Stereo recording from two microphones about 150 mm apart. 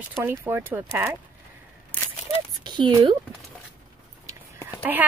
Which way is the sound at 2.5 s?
30° right (ahead or behind).